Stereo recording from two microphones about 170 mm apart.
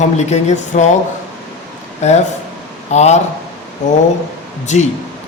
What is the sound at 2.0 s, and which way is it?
A man's voice, 40° left (ahead or behind).